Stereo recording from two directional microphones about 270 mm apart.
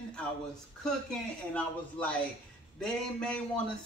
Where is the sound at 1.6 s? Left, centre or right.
Centre.